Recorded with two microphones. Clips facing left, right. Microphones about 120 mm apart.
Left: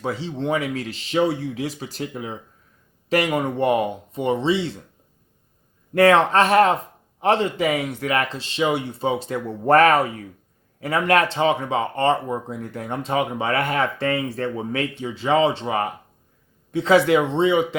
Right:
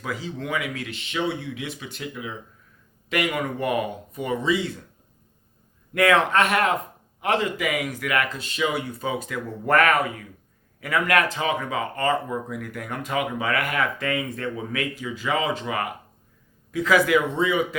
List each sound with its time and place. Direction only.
0.0 s speech: 30° left (ahead or behind)
5.9 s speech: 30° left (ahead or behind)